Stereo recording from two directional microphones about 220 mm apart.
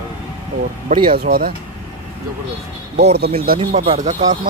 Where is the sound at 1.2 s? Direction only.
45° right (ahead or behind).